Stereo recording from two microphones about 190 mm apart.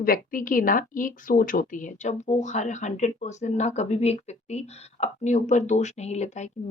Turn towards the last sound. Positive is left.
turn(degrees=35)  # may be behind; listen again after turning